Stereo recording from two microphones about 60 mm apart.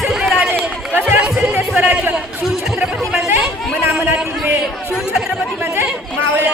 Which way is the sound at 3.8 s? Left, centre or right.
Right.